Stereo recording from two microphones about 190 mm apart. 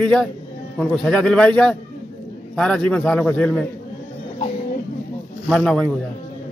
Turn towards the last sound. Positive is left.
turn(degrees=5)  # may be behind; listen again after turning